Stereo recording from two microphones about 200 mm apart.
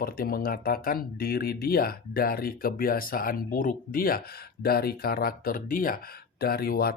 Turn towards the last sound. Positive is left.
turn(degrees=50)  # may be behind; listen again after turning